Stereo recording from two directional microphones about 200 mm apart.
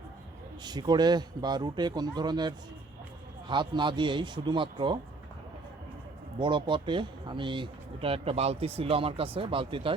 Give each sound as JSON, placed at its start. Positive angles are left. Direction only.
{"t": 0.6, "sound": "speech", "side_deg": -20}
{"t": 6.4, "sound": "speech", "side_deg": -25}